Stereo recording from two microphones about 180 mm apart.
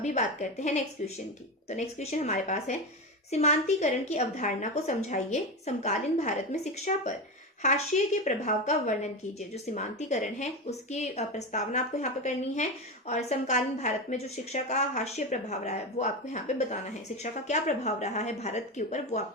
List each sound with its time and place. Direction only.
0.6 s a woman's voice: 40° left (ahead or behind)